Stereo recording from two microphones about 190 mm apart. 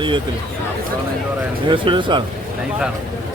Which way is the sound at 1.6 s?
25° right (ahead or behind).